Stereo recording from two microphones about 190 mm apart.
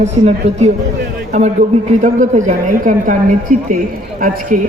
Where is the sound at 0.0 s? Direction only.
35° right (ahead or behind).